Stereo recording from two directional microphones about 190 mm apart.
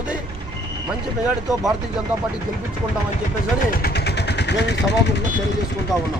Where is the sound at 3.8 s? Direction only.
60° left (ahead or behind).